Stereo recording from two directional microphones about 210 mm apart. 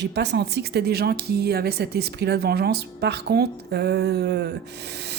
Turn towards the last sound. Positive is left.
turn(degrees=-55)  # may be behind; listen again after turning